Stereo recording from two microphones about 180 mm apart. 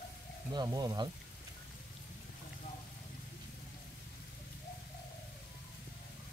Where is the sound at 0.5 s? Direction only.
20° right (ahead or behind).